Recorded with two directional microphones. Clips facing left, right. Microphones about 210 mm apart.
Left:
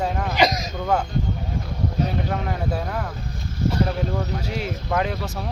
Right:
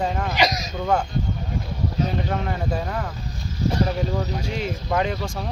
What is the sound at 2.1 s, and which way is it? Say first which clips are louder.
Speech: even; 5° left (ahead or behind).